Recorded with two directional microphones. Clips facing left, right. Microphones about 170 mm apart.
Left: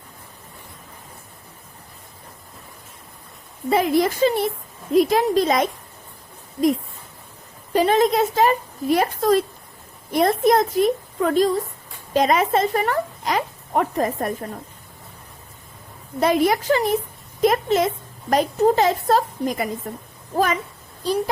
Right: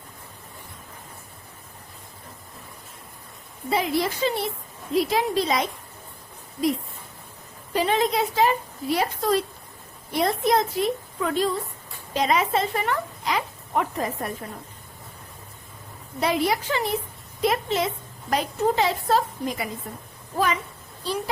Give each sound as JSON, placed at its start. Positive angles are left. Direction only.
{"t": 3.7, "sound": "a woman's voice", "side_deg": 50}
{"t": 7.7, "sound": "a woman's voice", "side_deg": 45}
{"t": 16.2, "sound": "a woman's voice", "side_deg": 45}